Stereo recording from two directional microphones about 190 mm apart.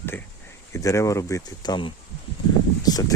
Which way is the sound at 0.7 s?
15° left (ahead or behind).